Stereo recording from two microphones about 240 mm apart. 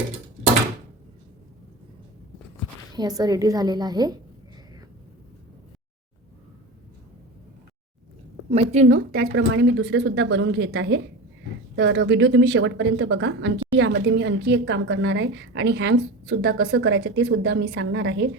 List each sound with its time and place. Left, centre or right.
2.9 s a woman's voice: centre
8.4 s speech: right